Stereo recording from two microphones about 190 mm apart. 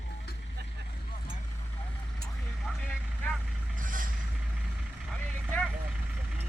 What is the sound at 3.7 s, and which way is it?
Vehicle, 45° right (ahead or behind).